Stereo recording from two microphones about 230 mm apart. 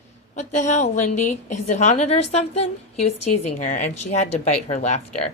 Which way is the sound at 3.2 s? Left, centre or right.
Left.